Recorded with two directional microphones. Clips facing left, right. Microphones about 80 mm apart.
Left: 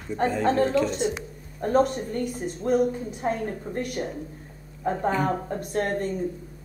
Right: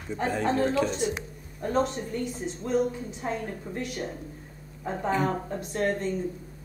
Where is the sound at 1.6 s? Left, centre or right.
Left.